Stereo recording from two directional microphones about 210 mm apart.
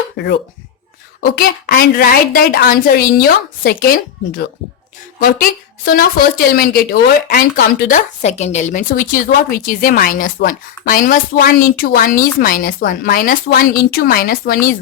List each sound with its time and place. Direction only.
1.2 s a woman's voice: 45° left (ahead or behind)
5.2 s a woman's voice: 45° left (ahead or behind)